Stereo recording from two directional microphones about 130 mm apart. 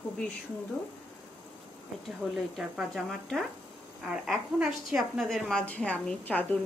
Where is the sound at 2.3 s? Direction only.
Centre (ahead or behind).